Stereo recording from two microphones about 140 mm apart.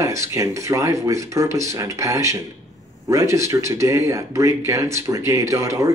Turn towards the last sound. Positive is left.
turn(degrees=-20)  # may be behind; listen again after turning